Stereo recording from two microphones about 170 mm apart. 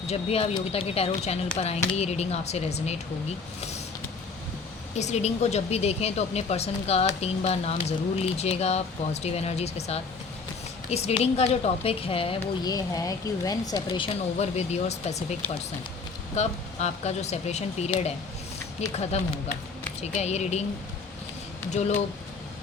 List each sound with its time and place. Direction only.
0.1 s speech: 35° left (ahead or behind)
4.9 s speech: 40° left (ahead or behind)
12.4 s speech: 20° left (ahead or behind)
14.3 s speech: 40° left (ahead or behind)
20.0 s speech: 40° left (ahead or behind)
21.7 s speech: 40° left (ahead or behind)